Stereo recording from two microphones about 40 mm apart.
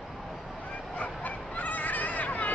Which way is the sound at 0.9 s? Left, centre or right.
Left.